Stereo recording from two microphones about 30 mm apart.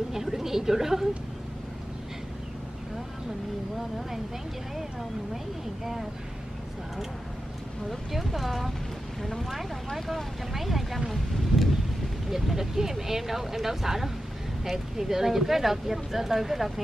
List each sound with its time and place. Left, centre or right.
0.1 s speech: centre
8.1 s speech: centre